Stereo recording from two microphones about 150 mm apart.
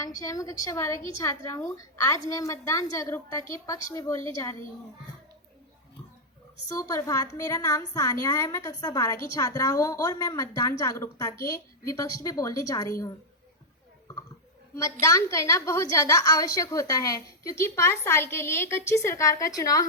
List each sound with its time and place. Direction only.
0.2 s a woman's voice: 25° left (ahead or behind)
6.7 s a woman's voice: 20° left (ahead or behind)
14.1 s a sound: 20° left (ahead or behind)
15.0 s a woman's voice: 20° left (ahead or behind)